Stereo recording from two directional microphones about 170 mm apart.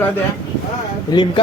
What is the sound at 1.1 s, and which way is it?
Speech, 25° left (ahead or behind).